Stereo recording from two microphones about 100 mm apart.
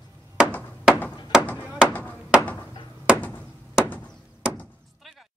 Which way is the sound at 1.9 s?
15° left (ahead or behind).